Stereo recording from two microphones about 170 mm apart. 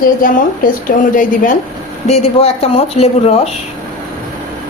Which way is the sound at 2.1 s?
40° left (ahead or behind).